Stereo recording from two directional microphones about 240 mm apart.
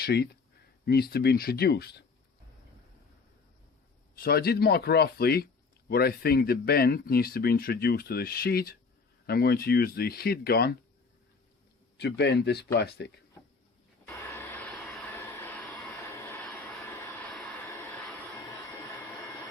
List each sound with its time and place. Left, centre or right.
0.0 s speech: left
4.1 s speech: left
11.9 s speech: left
14.1 s vehicle: centre